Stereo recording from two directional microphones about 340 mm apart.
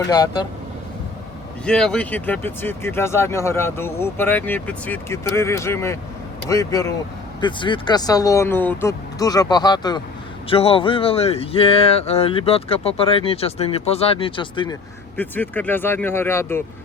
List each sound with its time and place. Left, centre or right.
0.1 s speech: centre
1.6 s speech: centre